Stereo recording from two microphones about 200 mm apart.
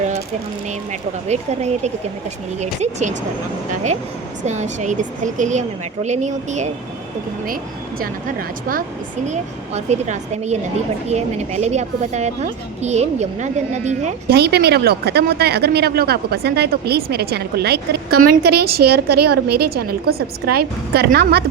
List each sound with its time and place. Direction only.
1.3 s a woman's voice: 35° right (ahead or behind)
4.4 s a woman's voice: 35° right (ahead or behind)
9.2 s a woman's voice: 35° right (ahead or behind)
14.3 s speech: 55° right (ahead or behind)